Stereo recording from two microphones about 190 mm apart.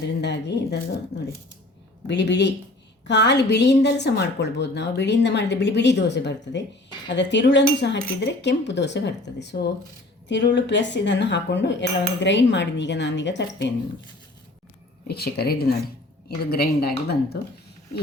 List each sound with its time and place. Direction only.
0.2 s a woman's voice: 65° left (ahead or behind)
2.0 s a woman's voice: 65° left (ahead or behind)
10.2 s cutlery: 65° left (ahead or behind)
15.0 s a woman's voice: 55° left (ahead or behind)